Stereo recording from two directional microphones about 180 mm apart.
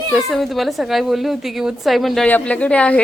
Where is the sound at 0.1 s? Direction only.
Centre (ahead or behind).